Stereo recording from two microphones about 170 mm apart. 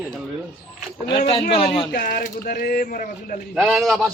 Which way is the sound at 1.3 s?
30° left (ahead or behind).